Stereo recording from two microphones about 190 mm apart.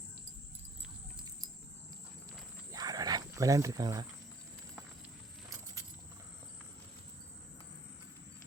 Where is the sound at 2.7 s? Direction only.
20° right (ahead or behind).